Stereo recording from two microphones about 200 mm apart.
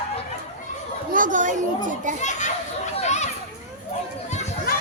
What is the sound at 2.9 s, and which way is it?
Children playing, 35° left (ahead or behind).